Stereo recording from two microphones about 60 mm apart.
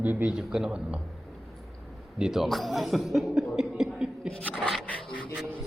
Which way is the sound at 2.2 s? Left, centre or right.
Centre.